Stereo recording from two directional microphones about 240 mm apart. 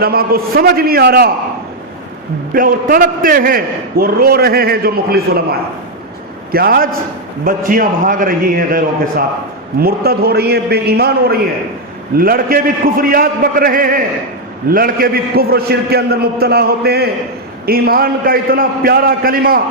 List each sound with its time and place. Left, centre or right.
0.0 s a man's voice: right
2.5 s a man's voice: right